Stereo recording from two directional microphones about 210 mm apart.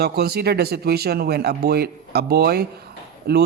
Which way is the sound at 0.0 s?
50° right (ahead or behind).